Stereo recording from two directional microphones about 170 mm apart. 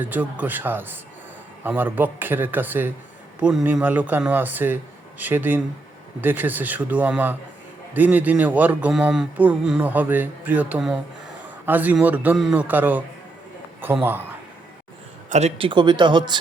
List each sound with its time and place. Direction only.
0.0 s speech: 10° right (ahead or behind)
15.3 s speech: 40° right (ahead or behind)